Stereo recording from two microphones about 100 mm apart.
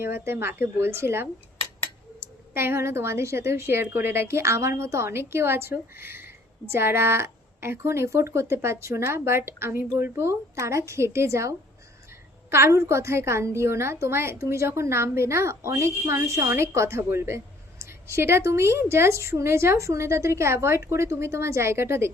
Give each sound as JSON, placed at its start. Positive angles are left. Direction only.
{"t": 0.0, "sound": "a woman's voice", "side_deg": -25}